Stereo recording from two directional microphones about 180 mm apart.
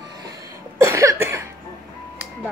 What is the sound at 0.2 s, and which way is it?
Music, 20° right (ahead or behind).